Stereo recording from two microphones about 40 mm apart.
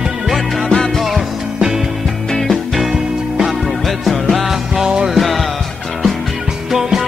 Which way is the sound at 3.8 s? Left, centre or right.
Centre.